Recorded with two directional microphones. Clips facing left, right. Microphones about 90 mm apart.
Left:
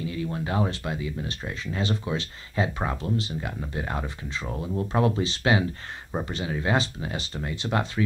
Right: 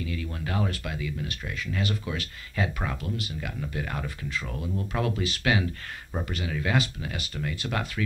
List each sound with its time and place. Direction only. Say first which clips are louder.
0.0 s speech: left 4 dB; 25° left (ahead or behind)